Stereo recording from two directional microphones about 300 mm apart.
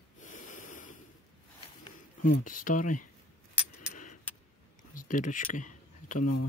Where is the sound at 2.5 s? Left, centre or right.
Left.